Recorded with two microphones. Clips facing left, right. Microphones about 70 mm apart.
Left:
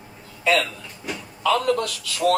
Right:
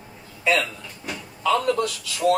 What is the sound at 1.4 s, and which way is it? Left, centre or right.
Speech, left.